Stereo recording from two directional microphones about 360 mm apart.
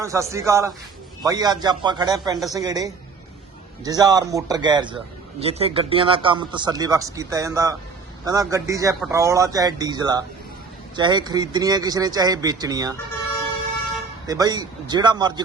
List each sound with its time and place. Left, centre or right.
0.0 s speech: centre
14.3 s speech: centre